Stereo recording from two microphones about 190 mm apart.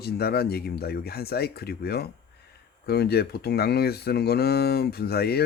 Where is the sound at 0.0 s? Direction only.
55° left (ahead or behind).